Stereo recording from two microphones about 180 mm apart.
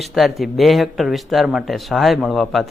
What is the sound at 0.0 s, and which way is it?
A man's voice, centre (ahead or behind).